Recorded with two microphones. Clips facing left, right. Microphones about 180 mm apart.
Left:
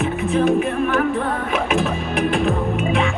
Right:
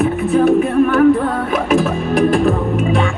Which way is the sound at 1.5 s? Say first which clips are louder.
Right 5 dB; 40° right (ahead or behind).